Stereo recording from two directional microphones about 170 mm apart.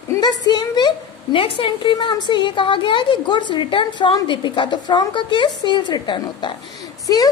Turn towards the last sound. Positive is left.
turn(degrees=20)  # may be behind; listen again after turning